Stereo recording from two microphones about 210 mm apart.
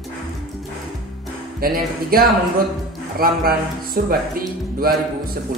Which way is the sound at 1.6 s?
45° right (ahead or behind).